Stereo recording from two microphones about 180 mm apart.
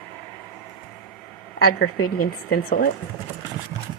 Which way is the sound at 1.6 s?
60° left (ahead or behind).